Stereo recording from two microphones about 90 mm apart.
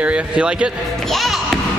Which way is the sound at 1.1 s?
Centre (ahead or behind).